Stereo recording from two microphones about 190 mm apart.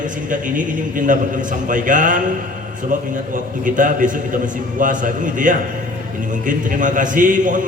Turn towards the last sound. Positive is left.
turn(degrees=-45)  # may be behind; listen again after turning